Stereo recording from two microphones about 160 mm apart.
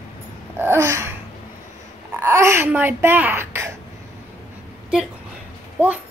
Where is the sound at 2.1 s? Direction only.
15° right (ahead or behind).